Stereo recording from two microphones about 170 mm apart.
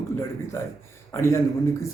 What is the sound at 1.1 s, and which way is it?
Speech, 15° left (ahead or behind).